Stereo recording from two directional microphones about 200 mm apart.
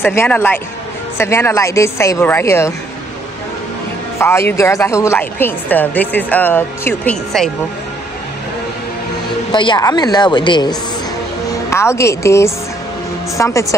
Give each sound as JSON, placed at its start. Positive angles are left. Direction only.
{"t": 0.0, "sound": "a woman's voice", "side_deg": 10}
{"t": 4.2, "sound": "a woman's voice", "side_deg": 10}
{"t": 9.5, "sound": "a woman's voice", "side_deg": 25}